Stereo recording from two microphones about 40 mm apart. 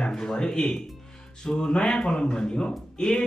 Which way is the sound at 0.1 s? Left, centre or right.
Centre.